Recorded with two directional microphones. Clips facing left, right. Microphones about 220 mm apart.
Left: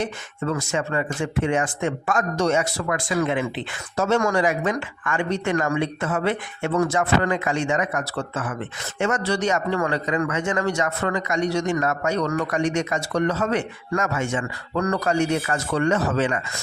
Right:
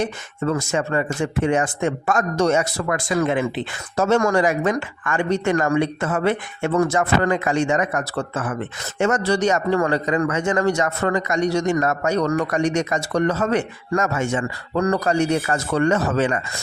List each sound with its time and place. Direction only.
0.0 s a man's voice: 45° right (ahead or behind)